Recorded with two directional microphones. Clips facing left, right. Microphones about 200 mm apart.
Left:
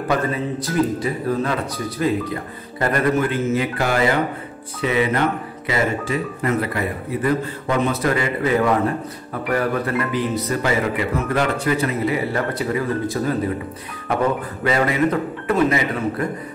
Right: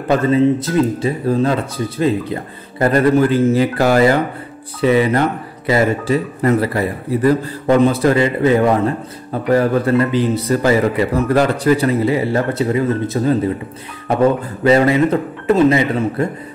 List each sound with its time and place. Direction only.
0.1 s speech: 25° right (ahead or behind)